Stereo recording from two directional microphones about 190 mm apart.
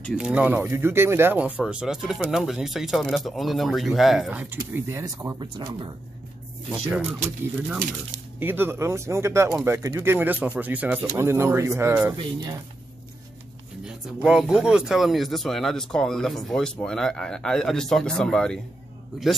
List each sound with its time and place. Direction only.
0.0 s speech: centre (ahead or behind); by 5.9 s 25° right (ahead or behind)
7.2 s speech: 10° right (ahead or behind)
12.2 s speech: 20° right (ahead or behind)
13.8 s speech: 5° right (ahead or behind)